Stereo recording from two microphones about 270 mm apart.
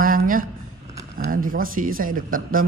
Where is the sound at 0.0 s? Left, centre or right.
Right.